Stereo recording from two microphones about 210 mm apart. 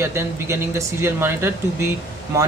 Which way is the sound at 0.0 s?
10° right (ahead or behind).